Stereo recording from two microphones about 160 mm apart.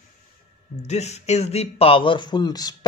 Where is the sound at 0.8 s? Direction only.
45° left (ahead or behind); by 2.7 s 25° left (ahead or behind).